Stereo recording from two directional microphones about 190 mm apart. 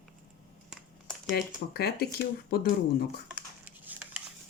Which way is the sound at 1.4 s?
55° left (ahead or behind).